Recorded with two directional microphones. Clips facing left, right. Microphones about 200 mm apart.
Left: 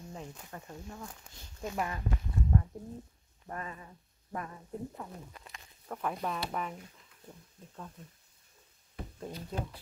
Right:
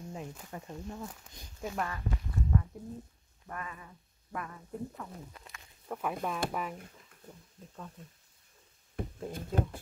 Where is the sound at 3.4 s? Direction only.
30° left (ahead or behind).